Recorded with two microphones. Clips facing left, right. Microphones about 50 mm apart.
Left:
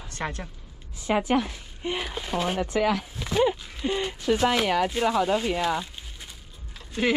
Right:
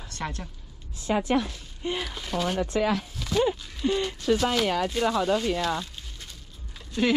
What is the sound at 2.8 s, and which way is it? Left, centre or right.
Speech, left.